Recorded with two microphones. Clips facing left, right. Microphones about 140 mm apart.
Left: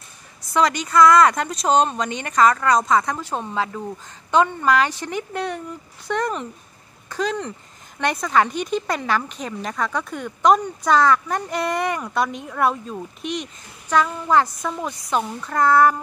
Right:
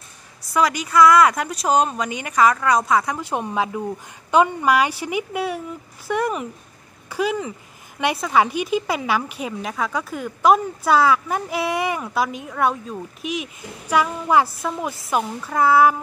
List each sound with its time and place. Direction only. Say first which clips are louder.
0.5 s a woman's voice: even; 5° right (ahead or behind)